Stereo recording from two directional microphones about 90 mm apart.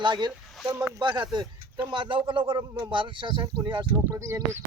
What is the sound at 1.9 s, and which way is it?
Speech, 65° right (ahead or behind).